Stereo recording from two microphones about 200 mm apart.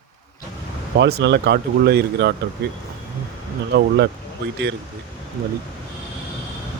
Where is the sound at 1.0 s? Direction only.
55° right (ahead or behind).